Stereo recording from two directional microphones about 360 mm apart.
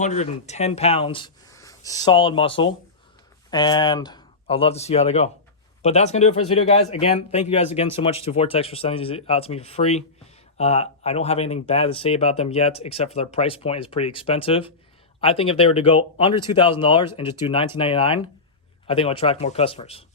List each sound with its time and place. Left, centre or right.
0.0 s speech: centre